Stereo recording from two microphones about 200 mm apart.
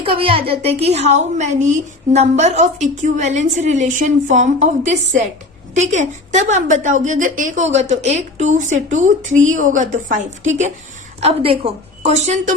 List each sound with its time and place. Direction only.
0.0 s a woman's voice: 25° right (ahead or behind)